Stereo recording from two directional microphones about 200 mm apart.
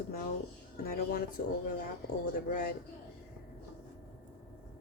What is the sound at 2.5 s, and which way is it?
Speech, 45° left (ahead or behind).